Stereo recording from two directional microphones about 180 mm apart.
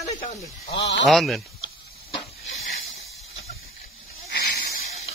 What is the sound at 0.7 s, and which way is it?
Speech, 70° left (ahead or behind).